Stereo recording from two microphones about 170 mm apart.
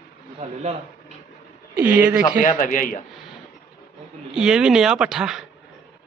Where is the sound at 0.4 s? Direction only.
40° right (ahead or behind).